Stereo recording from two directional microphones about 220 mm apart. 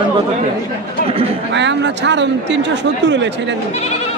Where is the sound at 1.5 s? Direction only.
55° right (ahead or behind).